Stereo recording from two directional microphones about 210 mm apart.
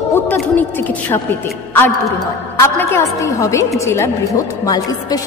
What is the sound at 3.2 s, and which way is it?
A woman's voice, 15° left (ahead or behind).